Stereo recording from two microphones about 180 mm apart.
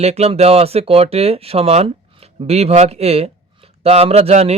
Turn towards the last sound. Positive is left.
turn(degrees=-35)  # may be behind; listen again after turning